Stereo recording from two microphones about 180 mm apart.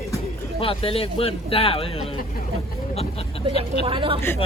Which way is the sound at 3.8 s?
30° right (ahead or behind).